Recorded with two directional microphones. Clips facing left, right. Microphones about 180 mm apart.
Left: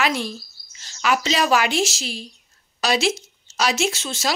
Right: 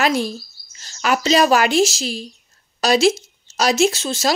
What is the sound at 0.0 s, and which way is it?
Speech, 40° right (ahead or behind).